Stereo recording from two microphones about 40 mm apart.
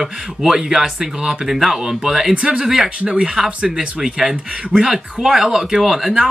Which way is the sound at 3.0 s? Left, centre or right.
Right.